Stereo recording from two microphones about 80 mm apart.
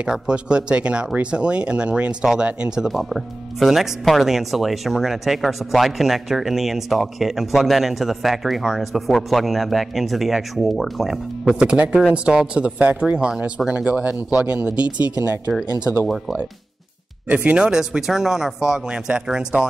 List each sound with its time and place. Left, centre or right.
0.0 s speech: centre
17.3 s speech: centre